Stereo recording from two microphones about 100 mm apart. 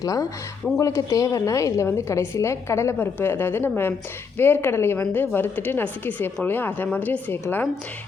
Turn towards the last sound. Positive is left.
turn(degrees=20)  # may be behind; listen again after turning